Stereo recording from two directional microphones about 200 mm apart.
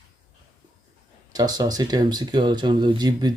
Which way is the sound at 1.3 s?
20° right (ahead or behind).